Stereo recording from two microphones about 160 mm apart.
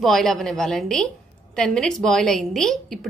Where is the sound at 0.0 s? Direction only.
Centre (ahead or behind).